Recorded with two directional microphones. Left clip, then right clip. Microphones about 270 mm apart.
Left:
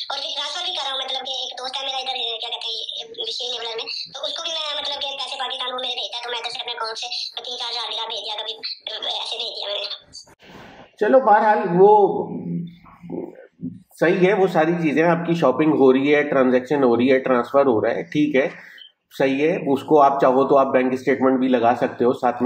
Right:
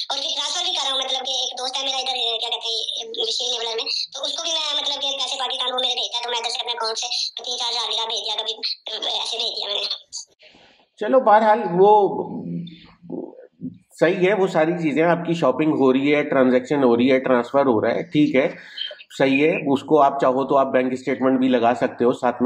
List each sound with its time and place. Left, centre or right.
0.0 s a woman's voice: right
11.0 s a man's voice: centre
13.9 s speech: centre